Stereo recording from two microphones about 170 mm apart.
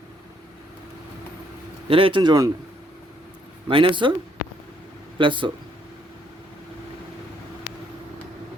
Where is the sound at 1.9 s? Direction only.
30° right (ahead or behind).